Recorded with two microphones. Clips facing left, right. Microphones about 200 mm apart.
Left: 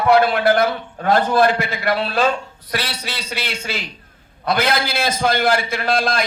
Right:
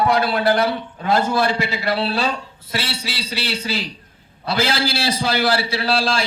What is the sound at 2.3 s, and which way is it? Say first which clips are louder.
A man's voice: left 3 dB; 30° right (ahead or behind).